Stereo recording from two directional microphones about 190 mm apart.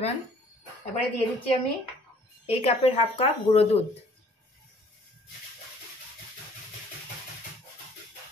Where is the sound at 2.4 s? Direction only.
35° left (ahead or behind).